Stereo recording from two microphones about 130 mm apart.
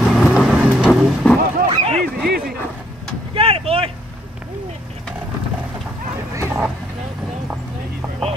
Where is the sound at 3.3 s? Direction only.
45° right (ahead or behind).